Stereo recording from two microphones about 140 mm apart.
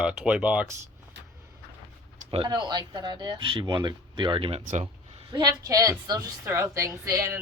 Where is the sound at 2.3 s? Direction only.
35° right (ahead or behind).